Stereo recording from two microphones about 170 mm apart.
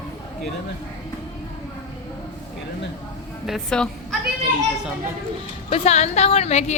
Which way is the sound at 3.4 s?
Centre (ahead or behind).